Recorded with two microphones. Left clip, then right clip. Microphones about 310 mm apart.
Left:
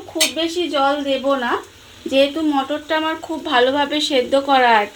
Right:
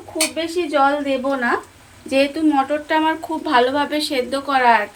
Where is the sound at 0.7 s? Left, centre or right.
Left.